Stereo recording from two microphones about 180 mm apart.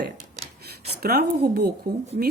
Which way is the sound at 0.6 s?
60° right (ahead or behind).